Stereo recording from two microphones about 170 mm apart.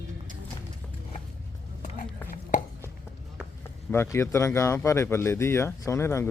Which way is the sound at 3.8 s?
15° left (ahead or behind).